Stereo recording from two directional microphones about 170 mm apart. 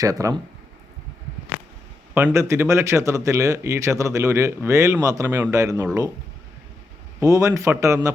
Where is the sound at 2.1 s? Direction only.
15° right (ahead or behind).